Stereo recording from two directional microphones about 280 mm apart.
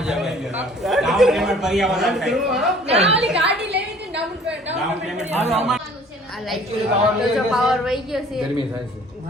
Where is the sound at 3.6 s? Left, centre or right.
Right.